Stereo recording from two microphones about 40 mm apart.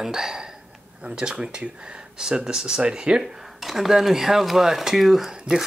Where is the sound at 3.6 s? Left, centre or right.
Centre.